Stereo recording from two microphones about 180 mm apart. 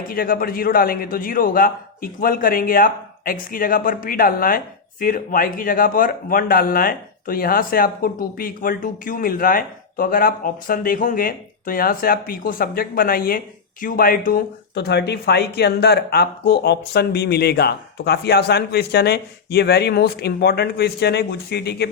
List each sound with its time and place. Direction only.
0.1 s a man's voice: 50° left (ahead or behind)